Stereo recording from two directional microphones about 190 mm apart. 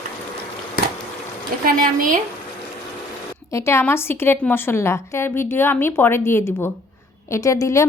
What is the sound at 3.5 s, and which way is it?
A woman's voice, 15° left (ahead or behind).